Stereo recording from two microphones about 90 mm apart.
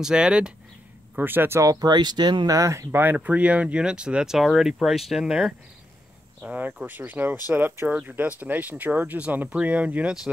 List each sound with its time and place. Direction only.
0.0 s speech: 10° right (ahead or behind)
1.1 s speech: 25° right (ahead or behind)
1.6 s speech: 40° right (ahead or behind)
1.9 s speech: 55° right (ahead or behind); by 2.9 s 35° right (ahead or behind)
2.9 s speech: 20° right (ahead or behind); by 5.5 s 5° right (ahead or behind)
6.4 s speech: 15° right (ahead or behind)